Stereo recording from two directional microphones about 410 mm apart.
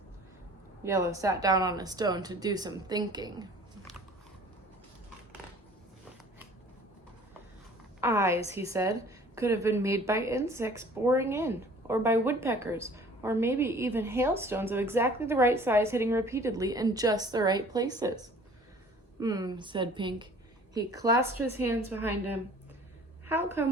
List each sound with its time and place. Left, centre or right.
0.9 s a woman's voice: centre
8.0 s a woman's voice: centre
19.2 s a woman's voice: centre